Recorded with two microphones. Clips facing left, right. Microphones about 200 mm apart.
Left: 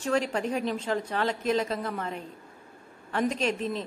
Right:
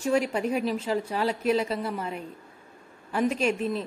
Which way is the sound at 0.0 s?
10° right (ahead or behind).